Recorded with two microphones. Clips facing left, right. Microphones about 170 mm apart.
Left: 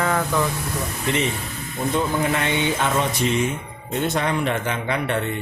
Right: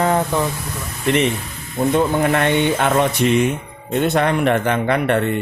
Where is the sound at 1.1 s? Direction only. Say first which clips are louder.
Right 7 dB; 65° right (ahead or behind).